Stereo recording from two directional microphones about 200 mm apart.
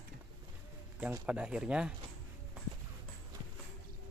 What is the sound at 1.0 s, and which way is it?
Speech, 5° right (ahead or behind).